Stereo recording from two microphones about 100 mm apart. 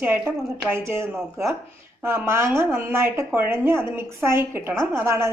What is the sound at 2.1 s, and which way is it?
A woman's voice, 25° right (ahead or behind).